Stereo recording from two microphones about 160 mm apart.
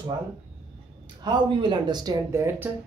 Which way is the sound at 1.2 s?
30° right (ahead or behind).